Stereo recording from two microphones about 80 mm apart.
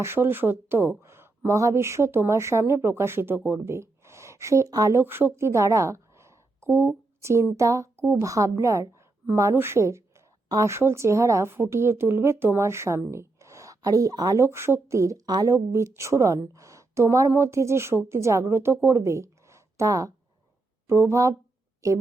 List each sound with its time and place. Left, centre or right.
0.0 s speech: right
4.7 s speech: right
4.9 s a woman's voice: right
8.0 s speech: right
8.3 s a woman's voice: right
13.1 s a sound: right
14.4 s speech: right